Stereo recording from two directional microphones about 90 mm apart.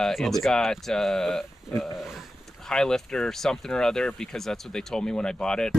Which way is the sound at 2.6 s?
5° left (ahead or behind).